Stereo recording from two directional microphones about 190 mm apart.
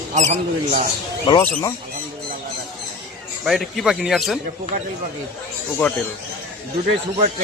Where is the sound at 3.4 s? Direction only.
Centre (ahead or behind).